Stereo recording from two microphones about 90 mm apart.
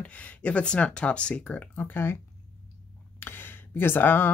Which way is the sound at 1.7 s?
25° left (ahead or behind).